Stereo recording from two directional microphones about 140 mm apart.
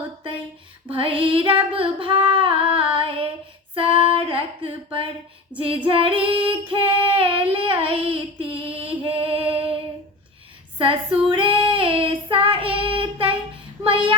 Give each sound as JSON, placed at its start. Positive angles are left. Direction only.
{"t": 0.9, "sound": "female singing", "side_deg": -40}
{"t": 3.8, "sound": "a sound", "side_deg": -40}
{"t": 10.8, "sound": "child singing", "side_deg": -40}